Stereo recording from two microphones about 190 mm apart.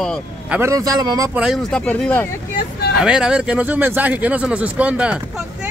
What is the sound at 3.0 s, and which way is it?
Speech, 5° right (ahead or behind).